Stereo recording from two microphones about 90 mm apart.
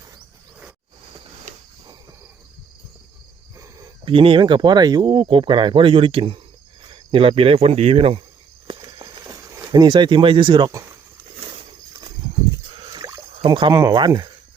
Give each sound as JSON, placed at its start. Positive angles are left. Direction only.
{"t": 3.6, "sound": "a sound", "side_deg": -40}
{"t": 4.0, "sound": "speech", "side_deg": -90}
{"t": 5.0, "sound": "speech", "side_deg": -75}
{"t": 8.8, "sound": "a sound", "side_deg": -45}
{"t": 12.7, "sound": "rowboat", "side_deg": -65}
{"t": 13.3, "sound": "speech", "side_deg": -80}